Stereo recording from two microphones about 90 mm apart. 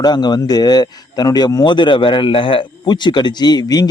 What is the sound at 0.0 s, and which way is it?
Speech, 50° left (ahead or behind).